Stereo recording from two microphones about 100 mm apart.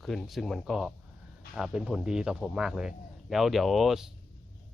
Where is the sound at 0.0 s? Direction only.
Centre (ahead or behind).